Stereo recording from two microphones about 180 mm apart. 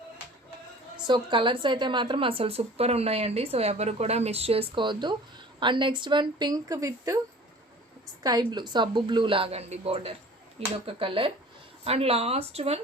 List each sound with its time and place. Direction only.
0.9 s a woman's voice: 25° right (ahead or behind)
8.2 s a woman's voice: 20° right (ahead or behind)